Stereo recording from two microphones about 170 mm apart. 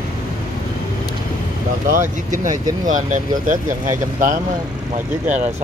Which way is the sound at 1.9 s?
50° right (ahead or behind).